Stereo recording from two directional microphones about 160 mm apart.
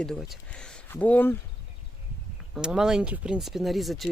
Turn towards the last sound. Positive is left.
turn(degrees=0)  # may be behind; listen again after turning